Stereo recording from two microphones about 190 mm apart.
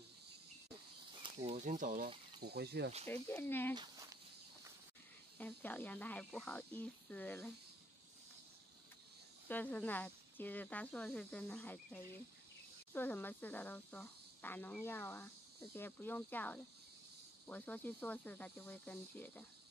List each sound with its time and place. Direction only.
1.4 s speech: 35° right (ahead or behind)
2.4 s speech: 60° right (ahead or behind)
3.1 s speech: 10° left (ahead or behind)
3.7 s a sound: 25° right (ahead or behind)
5.4 s speech: 10° left (ahead or behind)
9.5 s speech: 10° left (ahead or behind)